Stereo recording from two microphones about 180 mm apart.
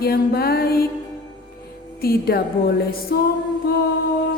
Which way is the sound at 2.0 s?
60° left (ahead or behind).